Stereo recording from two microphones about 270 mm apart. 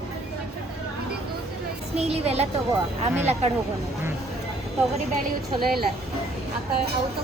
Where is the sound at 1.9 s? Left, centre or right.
Right.